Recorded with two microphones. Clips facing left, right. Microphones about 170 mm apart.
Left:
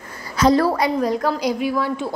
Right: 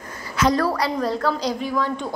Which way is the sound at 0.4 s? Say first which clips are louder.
Left 4 dB; 30° left (ahead or behind).